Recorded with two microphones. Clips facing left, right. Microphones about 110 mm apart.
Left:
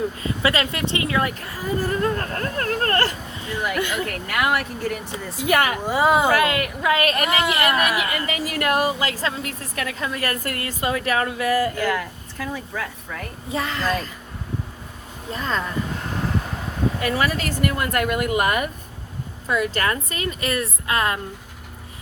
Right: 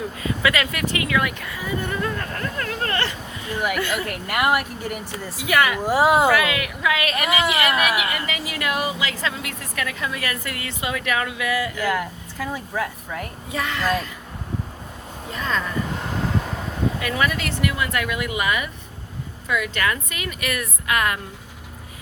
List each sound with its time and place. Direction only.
0.4 s a woman's voice: 30° left (ahead or behind)
4.0 s speech: 15° right (ahead or behind)
5.5 s speech: 40° left (ahead or behind)
5.8 s speech: 5° right (ahead or behind)
6.3 s a woman's voice: 40° left (ahead or behind)
7.3 s speech: centre (ahead or behind)
7.9 s a woman's voice: 45° left (ahead or behind)
11.9 s speech: 10° right (ahead or behind)
13.5 s a child's voice: 30° left (ahead or behind)
15.3 s a woman's voice: 35° left (ahead or behind)
17.0 s speech: 35° left (ahead or behind)
19.5 s a woman's voice: 35° left (ahead or behind)